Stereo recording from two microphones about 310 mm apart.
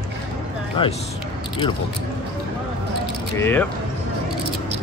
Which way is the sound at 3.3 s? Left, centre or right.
Centre.